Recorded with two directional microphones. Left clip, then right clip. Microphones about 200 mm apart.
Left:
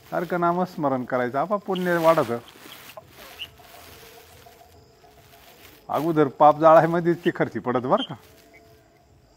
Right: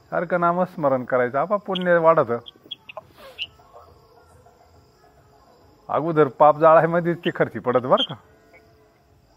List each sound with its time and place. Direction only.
0.1 s speech: 35° right (ahead or behind)
3.0 s chicken: 50° right (ahead or behind)
5.9 s speech: 35° right (ahead or behind)